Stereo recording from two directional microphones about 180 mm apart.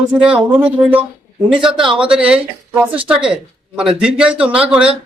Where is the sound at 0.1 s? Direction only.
5° right (ahead or behind).